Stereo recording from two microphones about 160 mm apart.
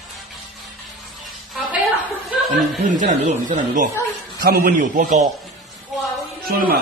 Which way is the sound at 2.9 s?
55° right (ahead or behind).